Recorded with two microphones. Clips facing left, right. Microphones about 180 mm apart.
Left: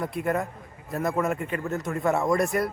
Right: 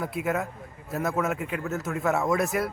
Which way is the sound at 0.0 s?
5° right (ahead or behind).